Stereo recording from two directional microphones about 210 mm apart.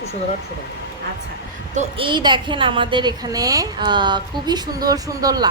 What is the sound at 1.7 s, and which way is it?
A woman's voice, 30° right (ahead or behind).